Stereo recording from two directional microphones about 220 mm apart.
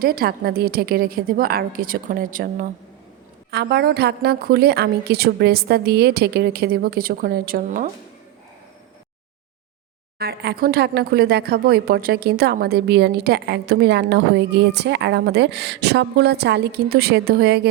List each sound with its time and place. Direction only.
0.0 s speech: 40° right (ahead or behind)
3.5 s speech: 50° right (ahead or behind)
10.2 s speech: 45° right (ahead or behind)